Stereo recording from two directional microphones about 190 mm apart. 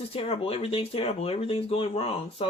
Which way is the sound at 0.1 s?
30° left (ahead or behind).